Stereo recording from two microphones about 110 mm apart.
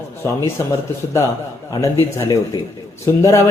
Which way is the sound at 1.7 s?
30° left (ahead or behind).